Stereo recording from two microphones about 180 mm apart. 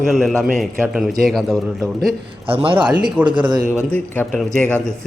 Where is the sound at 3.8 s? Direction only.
10° left (ahead or behind).